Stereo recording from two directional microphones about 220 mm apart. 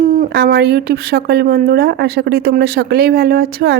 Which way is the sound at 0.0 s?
35° right (ahead or behind).